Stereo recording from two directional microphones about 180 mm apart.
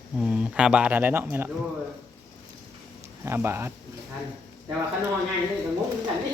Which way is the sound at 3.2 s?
15° right (ahead or behind).